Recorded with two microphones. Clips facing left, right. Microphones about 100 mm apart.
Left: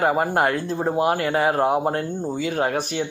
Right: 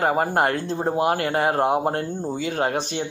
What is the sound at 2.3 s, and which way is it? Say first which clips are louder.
Speech: left 1 dB; 30° right (ahead or behind).